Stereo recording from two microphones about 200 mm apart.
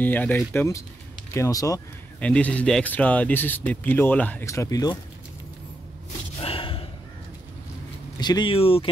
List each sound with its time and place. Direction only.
0.0 s speech: 10° left (ahead or behind)
2.1 s speech: 5° left (ahead or behind)
6.4 s slam: 25° left (ahead or behind)
8.2 s speech: 20° left (ahead or behind)